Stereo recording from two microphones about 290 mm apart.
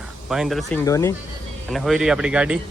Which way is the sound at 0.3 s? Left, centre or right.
Centre.